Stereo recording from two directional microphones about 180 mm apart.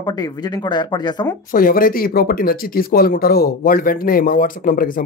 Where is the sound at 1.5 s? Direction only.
50° left (ahead or behind).